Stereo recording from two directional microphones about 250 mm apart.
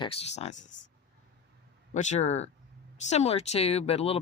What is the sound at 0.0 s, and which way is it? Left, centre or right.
Speech, left.